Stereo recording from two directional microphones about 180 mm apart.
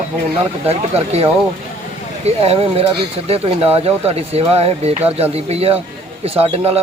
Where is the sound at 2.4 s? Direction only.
35° right (ahead or behind).